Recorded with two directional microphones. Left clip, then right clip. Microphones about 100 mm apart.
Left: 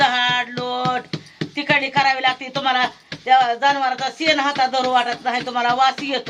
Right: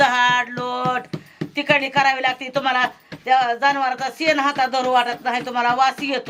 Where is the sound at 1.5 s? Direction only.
15° right (ahead or behind).